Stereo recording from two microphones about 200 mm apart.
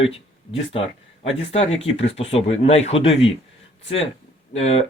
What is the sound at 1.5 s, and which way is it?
Speech, 30° left (ahead or behind).